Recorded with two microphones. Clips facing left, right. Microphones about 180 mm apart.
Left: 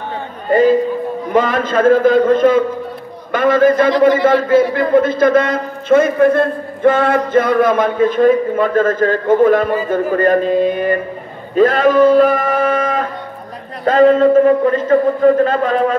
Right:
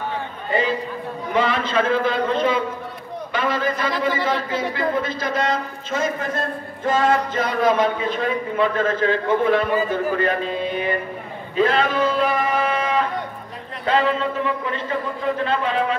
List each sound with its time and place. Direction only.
0.5 s a man's voice: 45° left (ahead or behind)